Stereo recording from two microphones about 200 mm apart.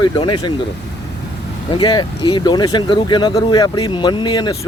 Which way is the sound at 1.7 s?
25° left (ahead or behind).